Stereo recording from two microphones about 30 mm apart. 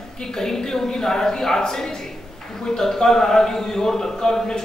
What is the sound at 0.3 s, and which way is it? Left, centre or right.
A man's voice, centre.